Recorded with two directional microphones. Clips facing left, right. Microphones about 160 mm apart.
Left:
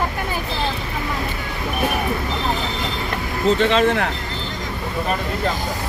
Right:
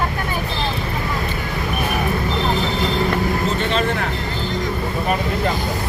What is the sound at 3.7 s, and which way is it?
Speech, 75° left (ahead or behind).